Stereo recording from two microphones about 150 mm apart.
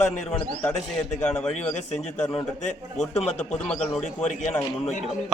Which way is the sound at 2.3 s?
50° left (ahead or behind).